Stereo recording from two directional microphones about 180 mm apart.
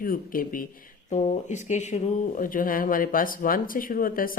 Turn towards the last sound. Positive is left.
turn(degrees=50)  # may be behind; listen again after turning